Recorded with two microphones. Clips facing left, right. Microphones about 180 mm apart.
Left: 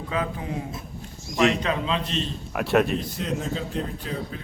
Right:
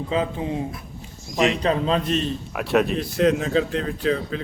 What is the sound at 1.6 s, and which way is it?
Speech, 40° right (ahead or behind).